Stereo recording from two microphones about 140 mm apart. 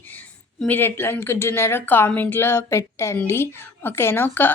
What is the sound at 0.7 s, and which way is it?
A woman's voice, 15° left (ahead or behind).